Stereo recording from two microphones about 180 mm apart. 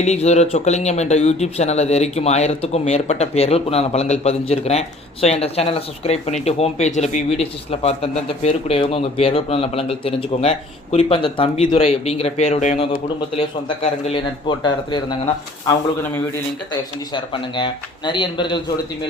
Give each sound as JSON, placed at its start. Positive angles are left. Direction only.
{"t": 0.0, "sound": "a man's voice", "side_deg": 40}
{"t": 17.2, "sound": "a man's voice", "side_deg": 25}